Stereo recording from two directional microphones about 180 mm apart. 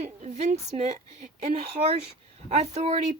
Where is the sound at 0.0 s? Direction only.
40° right (ahead or behind).